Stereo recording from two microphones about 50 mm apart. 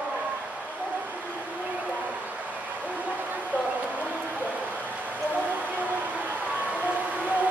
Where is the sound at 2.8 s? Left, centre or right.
Right.